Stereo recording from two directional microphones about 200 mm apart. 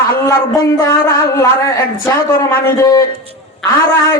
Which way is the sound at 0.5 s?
15° left (ahead or behind).